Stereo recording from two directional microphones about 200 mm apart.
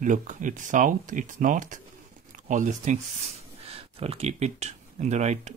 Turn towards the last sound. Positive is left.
turn(degrees=-35)  # may be behind; listen again after turning